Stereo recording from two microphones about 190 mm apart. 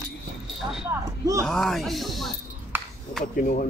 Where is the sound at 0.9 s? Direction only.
15° right (ahead or behind).